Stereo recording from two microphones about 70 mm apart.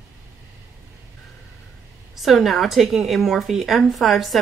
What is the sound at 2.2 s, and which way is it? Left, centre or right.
Speech, centre.